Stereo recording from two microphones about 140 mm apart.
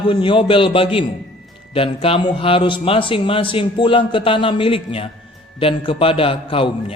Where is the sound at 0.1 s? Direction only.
35° left (ahead or behind).